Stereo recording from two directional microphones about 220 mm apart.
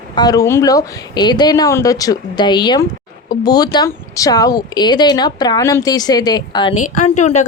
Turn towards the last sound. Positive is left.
turn(degrees=35)  # may be behind; listen again after turning